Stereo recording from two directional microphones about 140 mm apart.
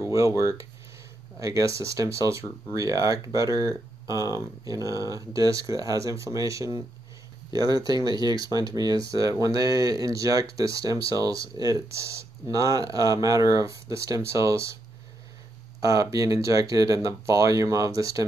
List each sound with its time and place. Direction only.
0.0 s speech: 20° right (ahead or behind)
15.8 s speech: 25° right (ahead or behind)